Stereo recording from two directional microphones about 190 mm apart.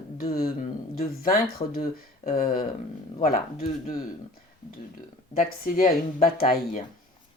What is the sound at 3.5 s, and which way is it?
Speech, 35° left (ahead or behind).